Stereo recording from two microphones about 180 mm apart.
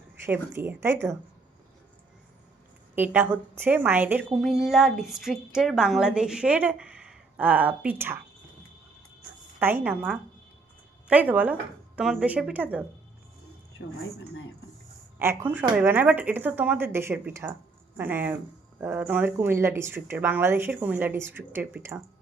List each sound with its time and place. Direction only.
0.3 s speech: 10° right (ahead or behind)
2.9 s a woman's voice: 10° right (ahead or behind)
9.6 s speech: 10° right (ahead or behind)
13.7 s a woman's voice: 70° left (ahead or behind)
15.2 s speech: 15° right (ahead or behind)